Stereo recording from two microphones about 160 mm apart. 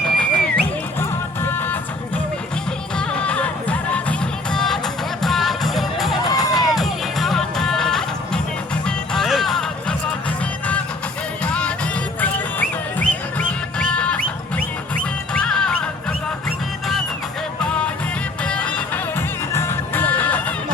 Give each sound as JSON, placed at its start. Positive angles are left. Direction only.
{"t": 0.2, "sound": "music", "side_deg": 5}
{"t": 3.0, "sound": "music", "side_deg": 5}
{"t": 6.2, "sound": "music", "side_deg": 20}
{"t": 6.6, "sound": "music", "side_deg": 0}
{"t": 11.4, "sound": "music", "side_deg": 5}
{"t": 15.3, "sound": "music", "side_deg": 5}
{"t": 17.6, "sound": "music", "side_deg": 5}